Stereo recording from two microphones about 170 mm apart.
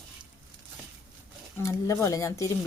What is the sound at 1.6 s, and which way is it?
Speech, 15° left (ahead or behind).